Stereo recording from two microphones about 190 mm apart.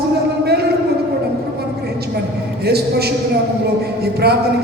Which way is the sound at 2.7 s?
55° right (ahead or behind).